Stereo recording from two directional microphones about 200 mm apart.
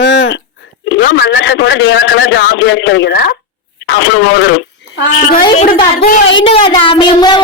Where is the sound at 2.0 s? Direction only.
70° left (ahead or behind); by 3.4 s 55° left (ahead or behind).